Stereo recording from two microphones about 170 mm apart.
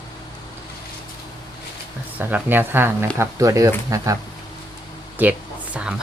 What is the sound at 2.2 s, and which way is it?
Speech, 10° right (ahead or behind).